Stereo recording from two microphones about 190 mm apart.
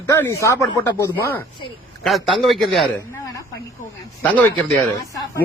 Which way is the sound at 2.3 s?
Centre (ahead or behind).